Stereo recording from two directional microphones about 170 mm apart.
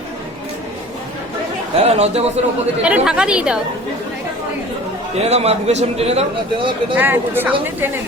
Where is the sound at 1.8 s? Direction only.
40° right (ahead or behind).